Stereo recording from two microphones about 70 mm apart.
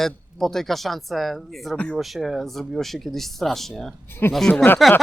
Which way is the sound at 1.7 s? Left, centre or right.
Centre.